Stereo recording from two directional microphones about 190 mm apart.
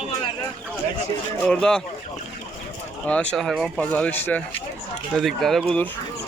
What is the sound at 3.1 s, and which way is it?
A man's voice, 5° left (ahead or behind).